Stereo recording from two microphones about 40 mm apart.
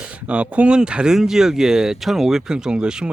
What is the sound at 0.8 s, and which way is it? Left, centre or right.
Speech, right.